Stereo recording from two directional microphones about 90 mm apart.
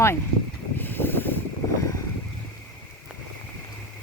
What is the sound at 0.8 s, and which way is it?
Mechanisms, 25° left (ahead or behind).